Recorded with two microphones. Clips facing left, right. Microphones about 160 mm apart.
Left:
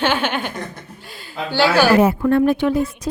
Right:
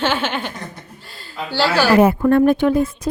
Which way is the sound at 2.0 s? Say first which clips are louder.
Right 2 dB; 50° right (ahead or behind).